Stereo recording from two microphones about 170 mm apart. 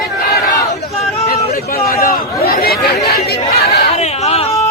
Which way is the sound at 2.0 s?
60° left (ahead or behind).